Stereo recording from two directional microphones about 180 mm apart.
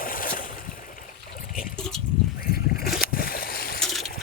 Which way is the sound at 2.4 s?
55° left (ahead or behind).